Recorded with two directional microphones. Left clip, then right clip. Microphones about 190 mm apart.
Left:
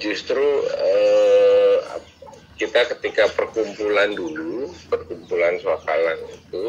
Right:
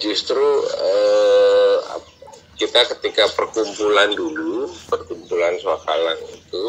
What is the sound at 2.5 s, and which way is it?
A man's voice, 25° right (ahead or behind).